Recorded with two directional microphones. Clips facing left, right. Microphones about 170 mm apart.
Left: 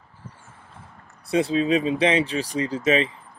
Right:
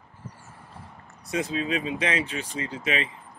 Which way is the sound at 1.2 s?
30° left (ahead or behind).